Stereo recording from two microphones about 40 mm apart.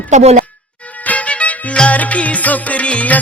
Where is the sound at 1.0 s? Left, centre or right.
Left.